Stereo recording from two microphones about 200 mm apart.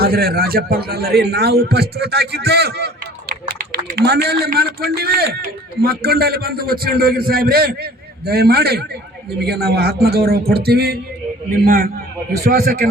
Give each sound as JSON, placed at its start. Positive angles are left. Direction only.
{"t": 0.0, "sound": "a man's voice", "side_deg": -50}